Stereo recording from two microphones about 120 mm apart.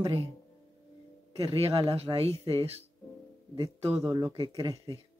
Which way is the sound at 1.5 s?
55° right (ahead or behind).